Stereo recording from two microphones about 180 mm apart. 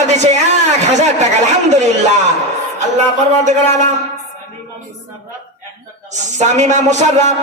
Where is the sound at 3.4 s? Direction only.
40° right (ahead or behind).